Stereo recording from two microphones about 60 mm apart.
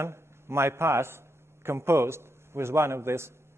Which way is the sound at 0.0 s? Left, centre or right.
Right.